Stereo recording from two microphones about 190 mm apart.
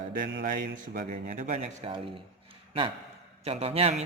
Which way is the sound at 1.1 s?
40° right (ahead or behind).